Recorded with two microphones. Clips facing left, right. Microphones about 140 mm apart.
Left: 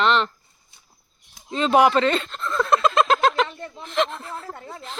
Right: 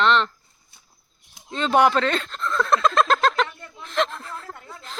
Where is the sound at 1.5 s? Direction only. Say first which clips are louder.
Left 2 dB; 5° left (ahead or behind).